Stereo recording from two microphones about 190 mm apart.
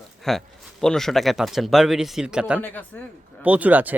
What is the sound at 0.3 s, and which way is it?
Speech, centre (ahead or behind).